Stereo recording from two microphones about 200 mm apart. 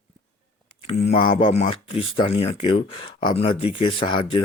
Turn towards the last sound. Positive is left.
turn(degrees=25)  # may be behind; listen again after turning